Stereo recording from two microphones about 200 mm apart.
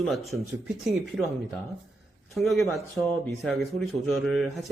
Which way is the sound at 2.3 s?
Centre (ahead or behind).